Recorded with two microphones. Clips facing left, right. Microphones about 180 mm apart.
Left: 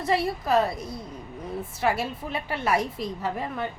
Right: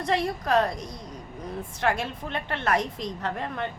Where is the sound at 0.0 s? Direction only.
5° left (ahead or behind).